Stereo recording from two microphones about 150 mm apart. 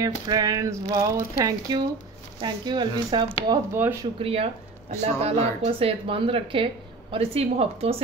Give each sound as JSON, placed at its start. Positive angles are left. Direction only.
{"t": 0.0, "sound": "speech", "side_deg": -25}
{"t": 4.2, "sound": "a woman's voice", "side_deg": -40}